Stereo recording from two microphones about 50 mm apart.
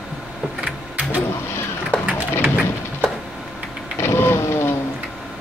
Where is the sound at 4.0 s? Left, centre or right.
Left.